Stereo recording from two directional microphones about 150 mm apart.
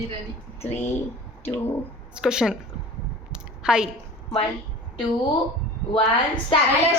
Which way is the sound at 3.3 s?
5° right (ahead or behind).